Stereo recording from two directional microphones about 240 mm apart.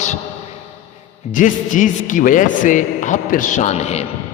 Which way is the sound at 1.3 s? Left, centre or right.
Left.